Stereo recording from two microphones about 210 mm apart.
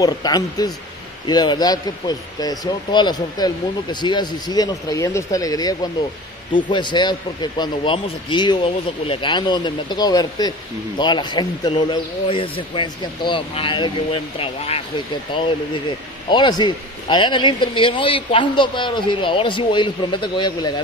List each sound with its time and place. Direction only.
0.0 s speech: 20° left (ahead or behind)
16.3 s speech: 20° left (ahead or behind)